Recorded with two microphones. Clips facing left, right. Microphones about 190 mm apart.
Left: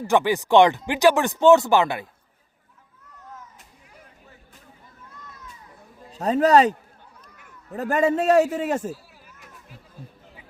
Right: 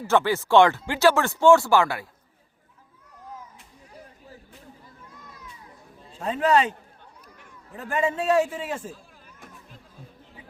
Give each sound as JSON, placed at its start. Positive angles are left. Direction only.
{"t": 0.1, "sound": "speech", "side_deg": 15}
{"t": 6.1, "sound": "a man's voice", "side_deg": 40}